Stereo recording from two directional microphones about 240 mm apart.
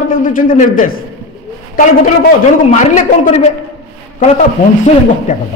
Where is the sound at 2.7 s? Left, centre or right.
Left.